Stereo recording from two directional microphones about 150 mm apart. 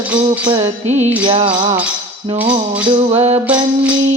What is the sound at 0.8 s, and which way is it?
Music, 50° right (ahead or behind).